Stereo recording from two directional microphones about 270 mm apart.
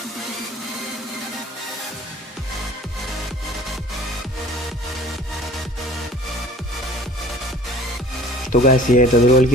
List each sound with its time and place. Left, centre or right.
8.6 s speech: left